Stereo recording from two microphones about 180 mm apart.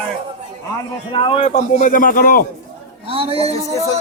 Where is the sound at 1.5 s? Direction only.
45° left (ahead or behind).